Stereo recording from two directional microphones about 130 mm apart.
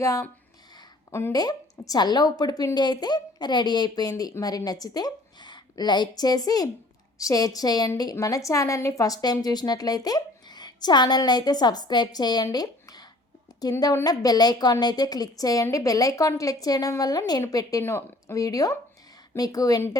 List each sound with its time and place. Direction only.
0.0 s a woman's voice: 25° left (ahead or behind)
1.3 s a woman's voice: 30° left (ahead or behind)